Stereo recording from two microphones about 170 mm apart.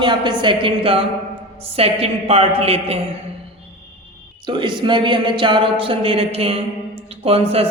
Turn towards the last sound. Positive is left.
turn(degrees=-35)  # may be behind; listen again after turning